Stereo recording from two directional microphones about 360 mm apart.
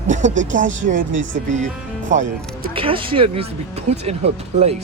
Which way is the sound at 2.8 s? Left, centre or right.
Centre.